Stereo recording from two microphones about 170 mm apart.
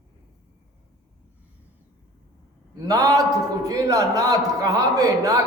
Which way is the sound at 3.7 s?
20° right (ahead or behind).